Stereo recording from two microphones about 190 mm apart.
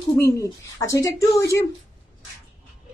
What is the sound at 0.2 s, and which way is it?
Speech, 15° left (ahead or behind).